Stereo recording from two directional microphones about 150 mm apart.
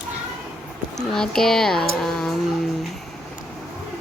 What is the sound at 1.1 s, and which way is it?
Speech, 5° left (ahead or behind).